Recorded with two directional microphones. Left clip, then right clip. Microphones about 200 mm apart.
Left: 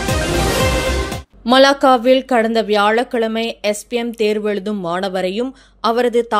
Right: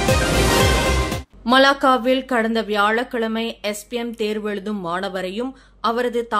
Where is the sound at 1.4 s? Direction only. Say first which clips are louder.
Left 4 dB; 25° left (ahead or behind).